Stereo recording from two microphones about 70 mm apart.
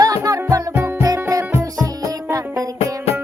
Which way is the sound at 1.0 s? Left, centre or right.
Right.